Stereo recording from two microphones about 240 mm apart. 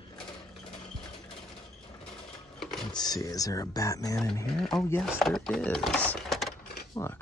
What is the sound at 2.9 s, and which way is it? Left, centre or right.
Speech, centre.